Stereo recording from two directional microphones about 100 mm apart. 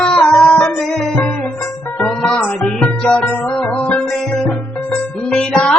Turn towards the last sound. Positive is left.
turn(degrees=10)  # may be behind; listen again after turning